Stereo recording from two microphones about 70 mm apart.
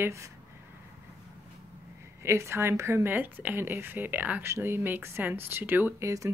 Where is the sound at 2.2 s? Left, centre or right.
Right.